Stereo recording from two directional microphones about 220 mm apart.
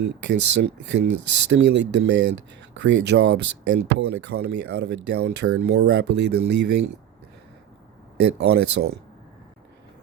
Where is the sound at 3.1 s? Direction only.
55° right (ahead or behind).